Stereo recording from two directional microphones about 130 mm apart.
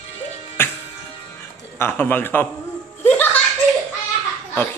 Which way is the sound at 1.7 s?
15° left (ahead or behind).